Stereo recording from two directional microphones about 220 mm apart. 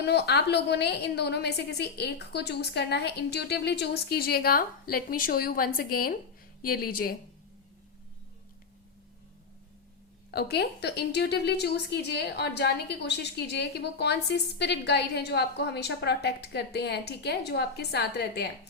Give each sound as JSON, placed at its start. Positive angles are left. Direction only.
{"t": 0.0, "sound": "a woman's voice", "side_deg": 50}
{"t": 10.3, "sound": "a woman's voice", "side_deg": 45}